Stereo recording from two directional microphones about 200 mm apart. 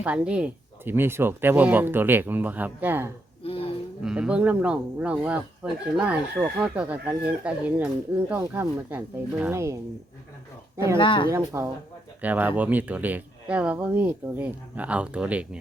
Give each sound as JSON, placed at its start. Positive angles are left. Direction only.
{"t": 0.0, "sound": "speech", "side_deg": -5}
{"t": 3.4, "sound": "roaring cats", "side_deg": 30}
{"t": 4.0, "sound": "speech", "side_deg": -5}
{"t": 10.9, "sound": "speech", "side_deg": 25}
{"t": 11.3, "sound": "speech", "side_deg": -15}